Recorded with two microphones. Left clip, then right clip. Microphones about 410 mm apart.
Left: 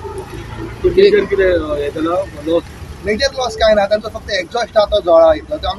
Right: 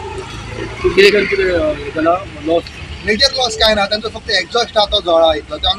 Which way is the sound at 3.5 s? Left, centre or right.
Left.